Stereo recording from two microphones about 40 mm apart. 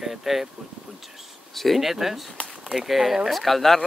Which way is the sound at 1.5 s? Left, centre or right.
Centre.